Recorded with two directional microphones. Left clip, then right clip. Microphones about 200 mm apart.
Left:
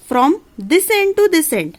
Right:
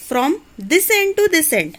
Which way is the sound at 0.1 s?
50° left (ahead or behind).